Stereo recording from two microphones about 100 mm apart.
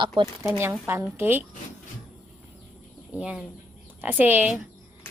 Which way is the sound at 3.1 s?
10° right (ahead or behind).